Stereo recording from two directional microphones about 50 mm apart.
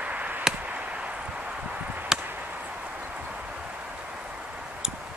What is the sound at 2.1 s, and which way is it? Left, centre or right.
Chop, centre.